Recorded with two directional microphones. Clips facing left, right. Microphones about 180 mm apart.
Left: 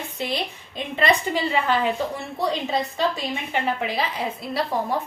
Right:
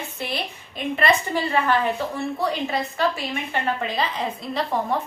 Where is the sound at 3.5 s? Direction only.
10° left (ahead or behind).